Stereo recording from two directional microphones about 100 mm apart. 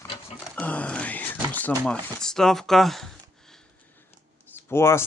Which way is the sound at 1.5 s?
15° left (ahead or behind).